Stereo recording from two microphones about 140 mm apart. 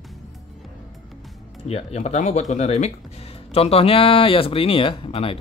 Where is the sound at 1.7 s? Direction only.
45° left (ahead or behind).